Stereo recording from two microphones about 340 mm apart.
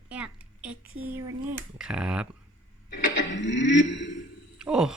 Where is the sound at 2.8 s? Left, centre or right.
Left.